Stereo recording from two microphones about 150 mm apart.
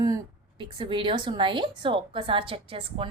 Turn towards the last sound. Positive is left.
turn(degrees=-35)  # may be behind; listen again after turning